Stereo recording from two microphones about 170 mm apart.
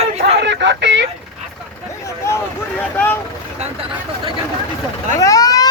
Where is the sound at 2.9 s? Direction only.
10° left (ahead or behind).